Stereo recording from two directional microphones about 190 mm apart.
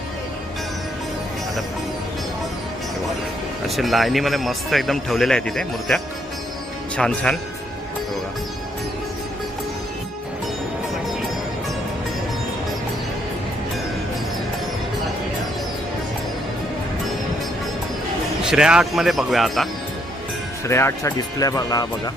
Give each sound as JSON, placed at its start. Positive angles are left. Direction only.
{"t": 3.7, "sound": "a man's voice", "side_deg": 0}
{"t": 18.5, "sound": "a man's voice", "side_deg": -5}
{"t": 20.7, "sound": "speech", "side_deg": 15}